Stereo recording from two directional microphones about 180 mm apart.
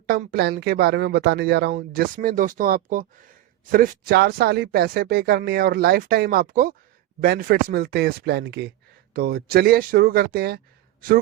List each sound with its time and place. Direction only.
0.1 s speech: 55° right (ahead or behind)
9.1 s speech: 55° right (ahead or behind)